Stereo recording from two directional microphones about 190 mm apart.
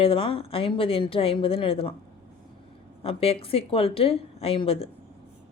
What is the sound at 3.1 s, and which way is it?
A woman's voice, 30° left (ahead or behind).